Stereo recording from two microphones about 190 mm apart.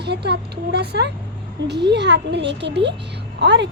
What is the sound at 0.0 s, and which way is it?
A woman's voice, 60° right (ahead or behind).